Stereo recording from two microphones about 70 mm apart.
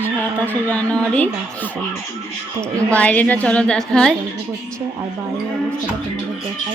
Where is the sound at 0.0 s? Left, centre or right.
Left.